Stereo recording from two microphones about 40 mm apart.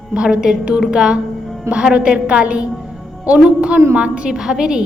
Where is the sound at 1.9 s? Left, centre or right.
Right.